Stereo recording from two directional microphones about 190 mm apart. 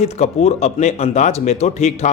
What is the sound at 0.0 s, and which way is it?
Speech, 35° left (ahead or behind).